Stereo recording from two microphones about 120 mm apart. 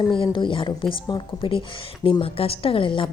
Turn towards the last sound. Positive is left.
turn(degrees=45)  # may be behind; listen again after turning